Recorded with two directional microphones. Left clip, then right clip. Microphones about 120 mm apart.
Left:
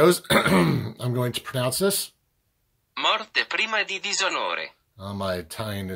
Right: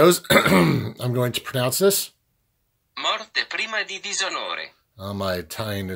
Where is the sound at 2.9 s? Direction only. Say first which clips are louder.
Left 1 dB; 45° left (ahead or behind).